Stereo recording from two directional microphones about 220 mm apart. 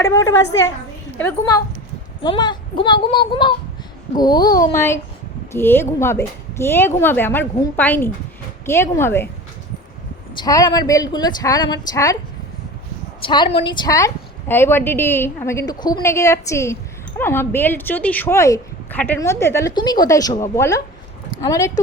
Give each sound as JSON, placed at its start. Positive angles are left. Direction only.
{"t": 0.0, "sound": "speech", "side_deg": 15}
{"t": 10.3, "sound": "speech", "side_deg": 15}
{"t": 13.2, "sound": "speech", "side_deg": 20}